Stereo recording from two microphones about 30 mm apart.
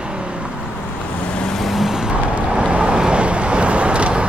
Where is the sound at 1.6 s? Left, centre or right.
Centre.